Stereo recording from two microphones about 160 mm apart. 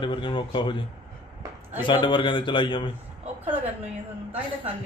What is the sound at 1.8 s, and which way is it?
Speech, 30° left (ahead or behind).